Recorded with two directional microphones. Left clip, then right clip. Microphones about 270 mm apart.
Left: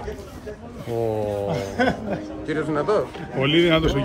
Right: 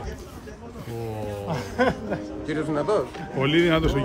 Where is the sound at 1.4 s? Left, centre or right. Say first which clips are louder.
Right 2 dB; right.